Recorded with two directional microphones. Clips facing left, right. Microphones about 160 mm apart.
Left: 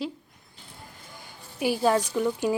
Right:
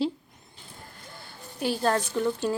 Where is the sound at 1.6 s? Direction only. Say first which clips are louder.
Left 2 dB; 10° left (ahead or behind).